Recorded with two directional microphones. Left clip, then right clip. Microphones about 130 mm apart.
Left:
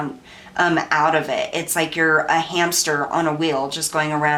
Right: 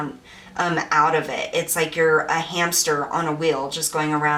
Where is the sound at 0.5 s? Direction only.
20° left (ahead or behind).